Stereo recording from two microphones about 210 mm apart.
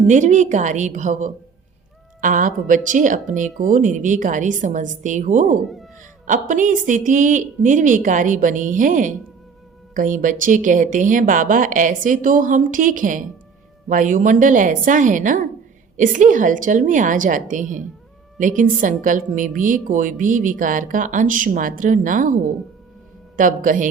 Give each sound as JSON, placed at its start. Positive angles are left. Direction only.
{"t": 0.1, "sound": "a woman's voice", "side_deg": -35}
{"t": 5.6, "sound": "speech", "side_deg": 0}
{"t": 6.2, "sound": "a woman's voice", "side_deg": -40}
{"t": 23.4, "sound": "a woman's voice", "side_deg": -40}